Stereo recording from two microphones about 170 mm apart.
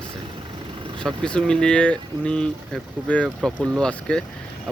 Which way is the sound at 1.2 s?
5° left (ahead or behind).